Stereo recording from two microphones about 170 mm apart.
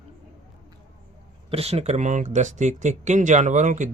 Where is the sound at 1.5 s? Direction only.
35° right (ahead or behind).